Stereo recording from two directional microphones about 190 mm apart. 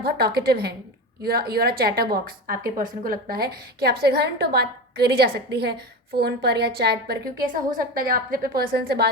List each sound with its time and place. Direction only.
0.0 s a woman's voice: 55° right (ahead or behind)